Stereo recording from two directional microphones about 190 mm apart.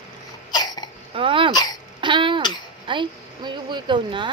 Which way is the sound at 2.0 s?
25° right (ahead or behind).